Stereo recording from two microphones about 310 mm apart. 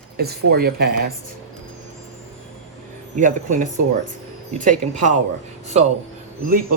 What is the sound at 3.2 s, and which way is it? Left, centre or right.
Speech, right.